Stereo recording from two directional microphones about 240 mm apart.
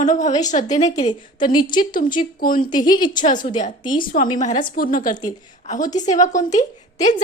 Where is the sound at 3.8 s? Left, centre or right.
Centre.